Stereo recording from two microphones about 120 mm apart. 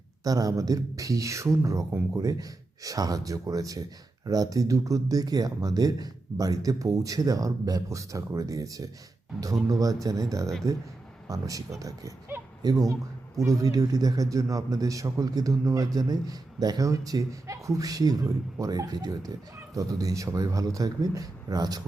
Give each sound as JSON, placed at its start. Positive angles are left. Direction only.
{"t": 0.3, "sound": "speech", "side_deg": -30}